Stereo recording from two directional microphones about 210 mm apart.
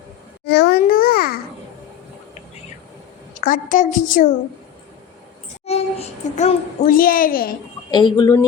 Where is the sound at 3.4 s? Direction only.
40° left (ahead or behind).